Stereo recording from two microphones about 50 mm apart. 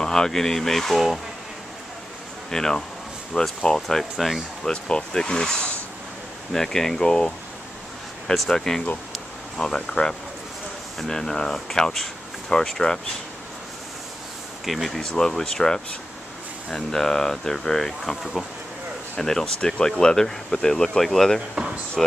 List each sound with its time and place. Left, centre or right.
0.0 s speech: centre
2.5 s speech: centre
4.6 s speech: centre
14.6 s speech: centre
19.1 s speech: centre